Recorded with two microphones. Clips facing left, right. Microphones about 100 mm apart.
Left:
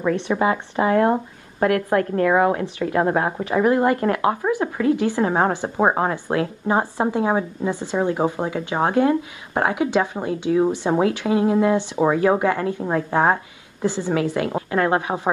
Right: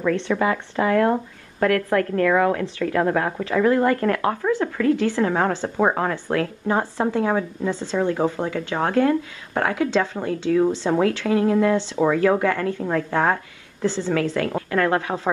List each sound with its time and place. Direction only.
0.1 s speech: 25° left (ahead or behind)
4.9 s a woman's voice: 15° left (ahead or behind)
5.2 s speech: 30° left (ahead or behind)
6.1 s speech: 20° left (ahead or behind)